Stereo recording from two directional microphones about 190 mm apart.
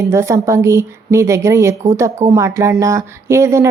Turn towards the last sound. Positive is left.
turn(degrees=-15)  # may be behind; listen again after turning